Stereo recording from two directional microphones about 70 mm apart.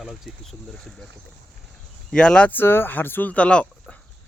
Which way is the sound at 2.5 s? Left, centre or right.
Left.